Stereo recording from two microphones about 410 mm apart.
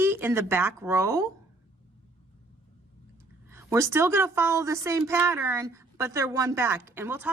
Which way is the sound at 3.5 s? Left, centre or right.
Centre.